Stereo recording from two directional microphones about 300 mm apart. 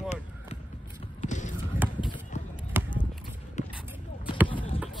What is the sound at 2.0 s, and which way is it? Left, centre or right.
Horse, centre.